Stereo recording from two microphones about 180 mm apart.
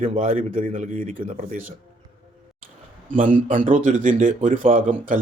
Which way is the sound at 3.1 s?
45° right (ahead or behind).